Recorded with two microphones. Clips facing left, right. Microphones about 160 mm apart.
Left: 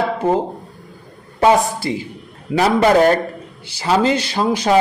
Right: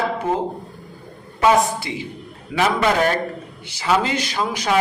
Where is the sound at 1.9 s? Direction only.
40° left (ahead or behind).